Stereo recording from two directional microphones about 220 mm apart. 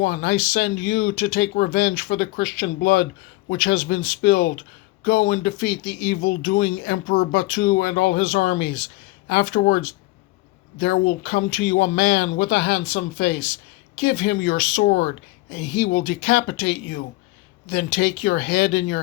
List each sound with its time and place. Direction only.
0.0 s speech: 45° left (ahead or behind)